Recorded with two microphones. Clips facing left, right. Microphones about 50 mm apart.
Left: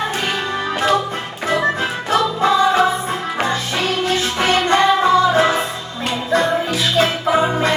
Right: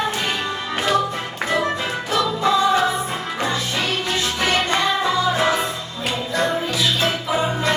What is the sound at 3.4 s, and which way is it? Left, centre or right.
Music, left.